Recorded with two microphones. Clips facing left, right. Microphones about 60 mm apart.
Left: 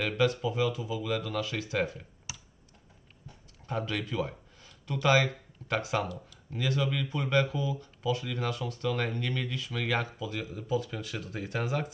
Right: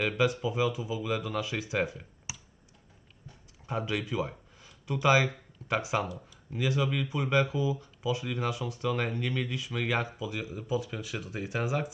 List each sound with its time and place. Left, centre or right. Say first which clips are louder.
0.0 s speech: even; centre
3.7 s speech: right 1 dB; centre